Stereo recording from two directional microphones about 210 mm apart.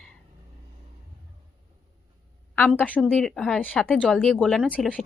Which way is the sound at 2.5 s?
10° left (ahead or behind).